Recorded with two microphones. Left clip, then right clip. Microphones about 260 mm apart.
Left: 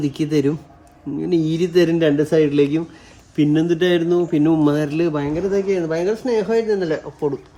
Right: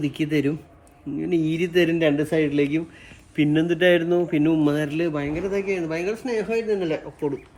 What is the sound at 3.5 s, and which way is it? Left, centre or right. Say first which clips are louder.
Speech: even; left.